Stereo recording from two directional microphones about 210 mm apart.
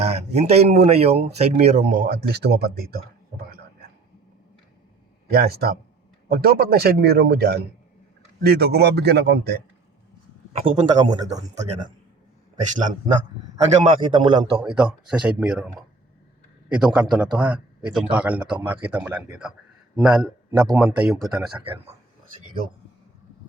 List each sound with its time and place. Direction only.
0.0 s speech: 30° right (ahead or behind); by 3.6 s 45° right (ahead or behind)
5.3 s a man's voice: 45° right (ahead or behind)
10.6 s a man's voice: 20° right (ahead or behind)
11.3 s speech: 35° right (ahead or behind)
13.6 s a man's voice: 30° right (ahead or behind)
14.6 s a man's voice: 5° right (ahead or behind)